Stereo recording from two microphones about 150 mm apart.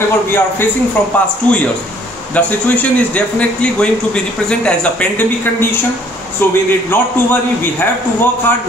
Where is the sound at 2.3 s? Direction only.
10° left (ahead or behind).